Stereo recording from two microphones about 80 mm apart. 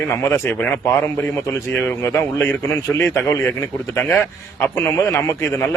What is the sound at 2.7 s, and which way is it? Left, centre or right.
Speech, left.